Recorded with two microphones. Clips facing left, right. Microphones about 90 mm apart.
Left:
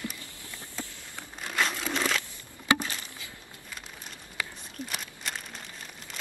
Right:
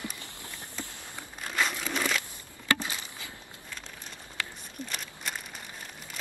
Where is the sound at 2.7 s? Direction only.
20° left (ahead or behind).